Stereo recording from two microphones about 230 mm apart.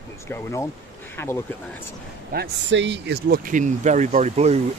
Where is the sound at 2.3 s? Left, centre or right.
Right.